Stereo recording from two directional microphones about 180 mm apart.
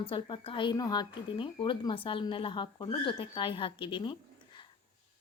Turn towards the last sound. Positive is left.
turn(degrees=25)  # may be behind; listen again after turning